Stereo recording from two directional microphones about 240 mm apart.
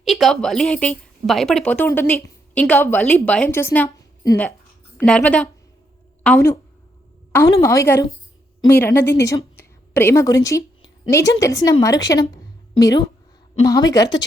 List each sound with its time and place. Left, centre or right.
0.0 s a woman's voice: centre